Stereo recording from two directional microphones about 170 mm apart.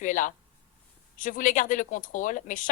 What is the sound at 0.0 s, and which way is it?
Speech, 50° left (ahead or behind).